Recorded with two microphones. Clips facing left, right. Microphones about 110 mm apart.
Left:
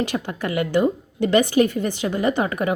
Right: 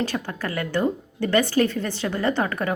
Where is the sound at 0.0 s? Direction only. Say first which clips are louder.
Left 2 dB; 15° left (ahead or behind).